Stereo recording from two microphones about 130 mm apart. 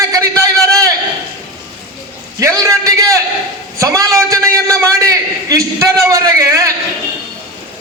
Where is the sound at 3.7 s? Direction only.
25° right (ahead or behind).